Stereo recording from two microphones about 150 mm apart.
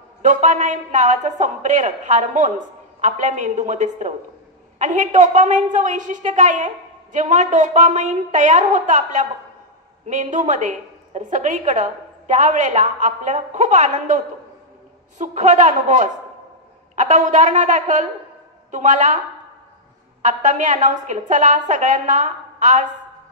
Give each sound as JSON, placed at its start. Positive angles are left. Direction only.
{"t": 0.2, "sound": "a woman's voice", "side_deg": -55}
{"t": 20.2, "sound": "a woman's voice", "side_deg": -55}